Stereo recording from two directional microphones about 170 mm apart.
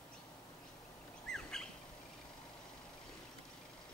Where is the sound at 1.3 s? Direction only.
5° left (ahead or behind).